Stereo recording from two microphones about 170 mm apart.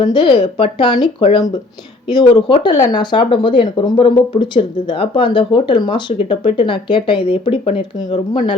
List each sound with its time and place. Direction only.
0.0 s speech: 25° left (ahead or behind)
2.1 s speech: 25° left (ahead or behind)